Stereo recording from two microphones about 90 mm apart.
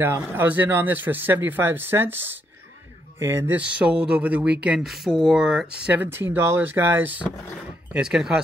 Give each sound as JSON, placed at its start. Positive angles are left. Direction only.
{"t": 0.0, "sound": "speech", "side_deg": -20}
{"t": 3.2, "sound": "speech", "side_deg": -30}
{"t": 3.5, "sound": "speech", "side_deg": -10}
{"t": 6.3, "sound": "speech", "side_deg": -25}
{"t": 7.9, "sound": "speech", "side_deg": -5}